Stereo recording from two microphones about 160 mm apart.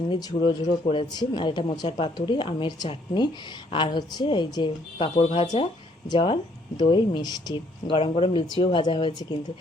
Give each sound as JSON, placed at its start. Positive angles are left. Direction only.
{"t": 0.1, "sound": "a woman's voice", "side_deg": 25}